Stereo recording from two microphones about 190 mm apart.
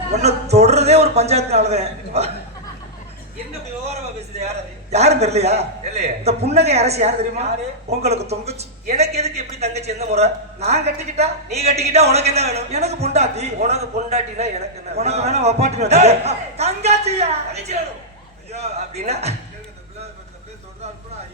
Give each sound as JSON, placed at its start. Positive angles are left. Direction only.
{"t": 0.1, "sound": "speech", "side_deg": -35}
{"t": 4.4, "sound": "speech", "side_deg": -35}